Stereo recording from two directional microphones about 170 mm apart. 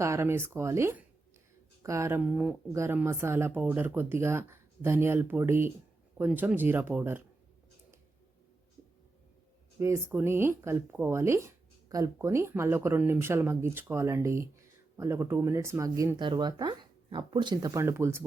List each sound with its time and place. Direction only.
0.0 s speech: 15° right (ahead or behind)
9.8 s speech: 15° right (ahead or behind)